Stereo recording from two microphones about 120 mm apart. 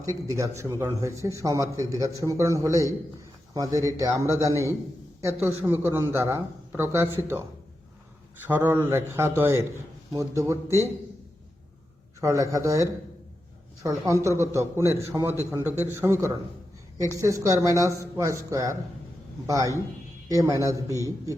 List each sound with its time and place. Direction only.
0.0 s a man's voice: 25° right (ahead or behind)
8.4 s a man's voice: 20° right (ahead or behind)
12.2 s a man's voice: 25° right (ahead or behind)
20.8 s a man's voice: 25° left (ahead or behind)